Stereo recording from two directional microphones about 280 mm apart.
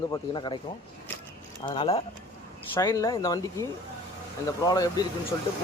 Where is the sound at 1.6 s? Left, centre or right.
Centre.